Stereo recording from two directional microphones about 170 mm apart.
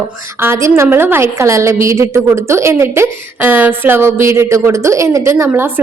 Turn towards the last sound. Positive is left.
turn(degrees=-10)  # may be behind; listen again after turning